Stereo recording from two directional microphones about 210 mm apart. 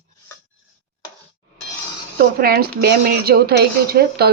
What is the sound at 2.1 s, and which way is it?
A woman's voice, 45° right (ahead or behind).